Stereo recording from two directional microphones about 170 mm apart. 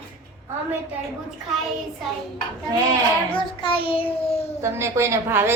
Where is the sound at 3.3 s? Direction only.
30° left (ahead or behind).